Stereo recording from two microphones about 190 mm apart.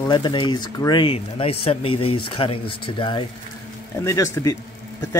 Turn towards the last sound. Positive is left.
turn(degrees=15)  # may be behind; listen again after turning